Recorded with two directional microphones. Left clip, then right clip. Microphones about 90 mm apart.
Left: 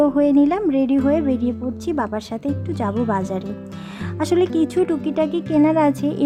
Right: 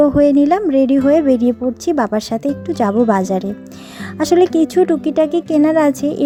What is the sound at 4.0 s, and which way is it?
A woman's voice, 40° right (ahead or behind).